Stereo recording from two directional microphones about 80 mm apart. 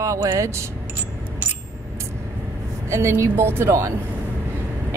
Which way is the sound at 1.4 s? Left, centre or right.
Right.